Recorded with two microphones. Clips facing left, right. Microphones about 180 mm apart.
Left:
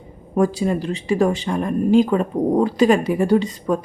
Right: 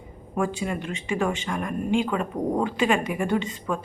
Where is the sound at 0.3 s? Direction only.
40° left (ahead or behind).